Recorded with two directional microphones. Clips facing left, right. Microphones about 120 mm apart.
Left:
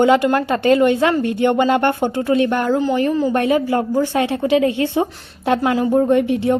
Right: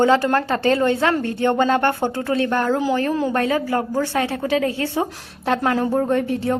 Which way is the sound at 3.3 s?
20° left (ahead or behind).